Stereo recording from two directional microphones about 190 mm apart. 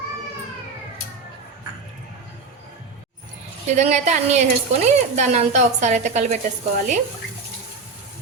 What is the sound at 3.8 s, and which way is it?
A woman's voice, 35° right (ahead or behind).